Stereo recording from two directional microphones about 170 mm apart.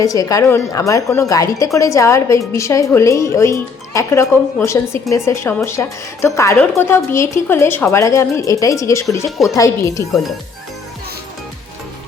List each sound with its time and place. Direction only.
0.0 s speech: 20° left (ahead or behind)